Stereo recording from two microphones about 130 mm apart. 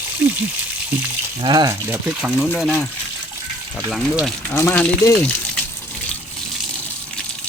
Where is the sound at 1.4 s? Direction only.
35° right (ahead or behind).